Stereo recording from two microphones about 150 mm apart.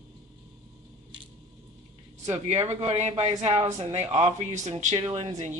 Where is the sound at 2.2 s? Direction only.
45° right (ahead or behind).